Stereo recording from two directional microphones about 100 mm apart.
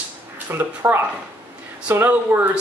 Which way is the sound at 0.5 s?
20° right (ahead or behind).